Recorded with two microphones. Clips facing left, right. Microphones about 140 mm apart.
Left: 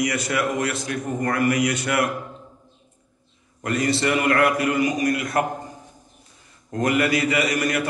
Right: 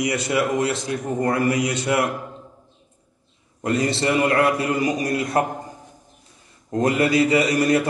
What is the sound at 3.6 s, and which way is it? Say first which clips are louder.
A man's voice: right 1 dB; 30° right (ahead or behind).